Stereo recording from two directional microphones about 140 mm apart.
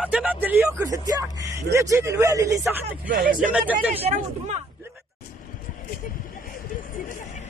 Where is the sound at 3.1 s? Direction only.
80° right.